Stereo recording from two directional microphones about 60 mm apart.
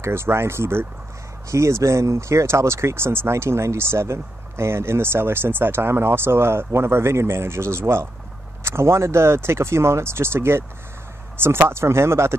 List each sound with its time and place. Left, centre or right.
0.0 s speech: right
1.5 s speech: right